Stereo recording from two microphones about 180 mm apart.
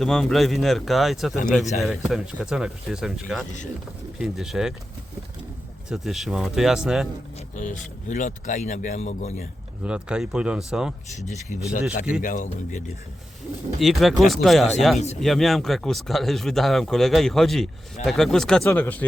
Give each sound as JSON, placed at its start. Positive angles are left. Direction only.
{"t": 0.0, "sound": "speech", "side_deg": 0}
{"t": 5.9, "sound": "speech", "side_deg": 0}
{"t": 7.3, "sound": "speech", "side_deg": 40}
{"t": 9.8, "sound": "speech", "side_deg": -5}
{"t": 11.3, "sound": "speech", "side_deg": 40}
{"t": 13.7, "sound": "speech", "side_deg": 0}